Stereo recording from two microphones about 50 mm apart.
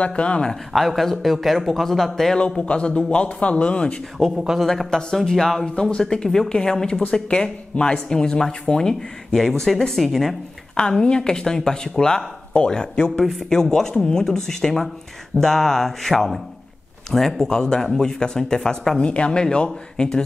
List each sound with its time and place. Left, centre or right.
0.0 s a man's voice: left
0.7 s a man's voice: centre
2.3 s a man's voice: left
4.6 s speech: centre
10.7 s speech: centre
13.2 s a man's voice: centre
13.5 s speech: centre